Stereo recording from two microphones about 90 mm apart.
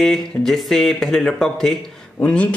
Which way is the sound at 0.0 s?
5° left (ahead or behind).